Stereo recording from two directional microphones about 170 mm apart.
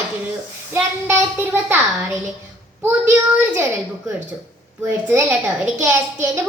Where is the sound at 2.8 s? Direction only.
10° right (ahead or behind).